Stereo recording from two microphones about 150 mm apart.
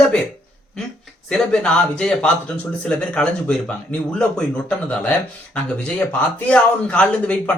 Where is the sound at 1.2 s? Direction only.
5° left (ahead or behind).